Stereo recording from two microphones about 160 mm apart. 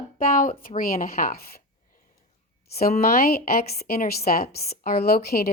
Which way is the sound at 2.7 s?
70° left (ahead or behind).